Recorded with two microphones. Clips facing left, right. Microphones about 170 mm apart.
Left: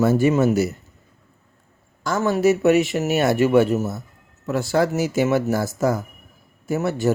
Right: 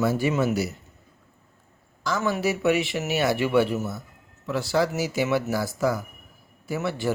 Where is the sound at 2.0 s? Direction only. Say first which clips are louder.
Left 6 dB; 50° left (ahead or behind).